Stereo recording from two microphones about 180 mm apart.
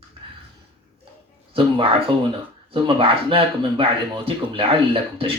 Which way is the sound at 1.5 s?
30° right (ahead or behind).